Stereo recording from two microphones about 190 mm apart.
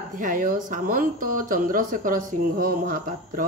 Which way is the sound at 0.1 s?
45° right (ahead or behind).